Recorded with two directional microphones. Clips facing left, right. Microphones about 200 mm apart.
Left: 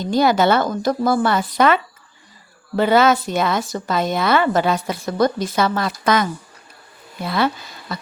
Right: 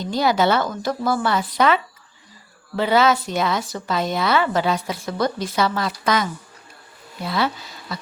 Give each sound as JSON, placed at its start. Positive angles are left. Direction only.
{"t": 0.1, "sound": "speech", "side_deg": 50}
{"t": 7.3, "sound": "speech", "side_deg": 55}